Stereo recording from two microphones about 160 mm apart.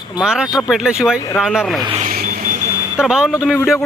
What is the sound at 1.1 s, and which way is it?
Speech, 20° left (ahead or behind).